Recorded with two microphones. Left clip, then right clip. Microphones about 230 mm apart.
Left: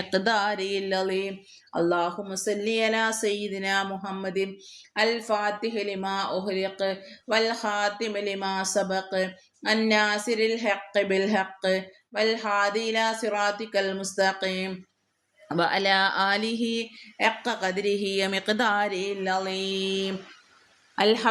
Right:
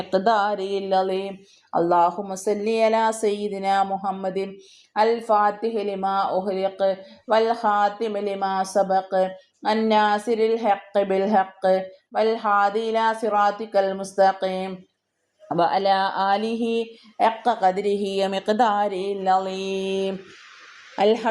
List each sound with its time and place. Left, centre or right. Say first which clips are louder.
0.3 s speech: right 5 dB; centre
8.4 s speech: right 6 dB; centre
8.9 s a woman's voice: right 7 dB; centre